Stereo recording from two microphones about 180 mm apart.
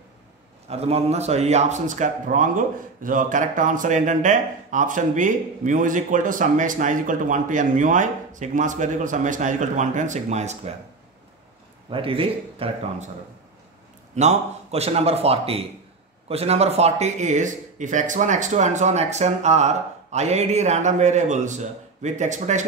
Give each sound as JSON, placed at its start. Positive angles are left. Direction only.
{"t": 0.7, "sound": "a man's voice", "side_deg": -35}
{"t": 11.9, "sound": "speech", "side_deg": -30}
{"t": 14.1, "sound": "speech", "side_deg": -35}